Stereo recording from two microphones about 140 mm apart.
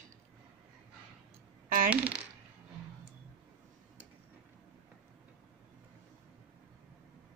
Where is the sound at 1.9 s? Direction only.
10° right (ahead or behind).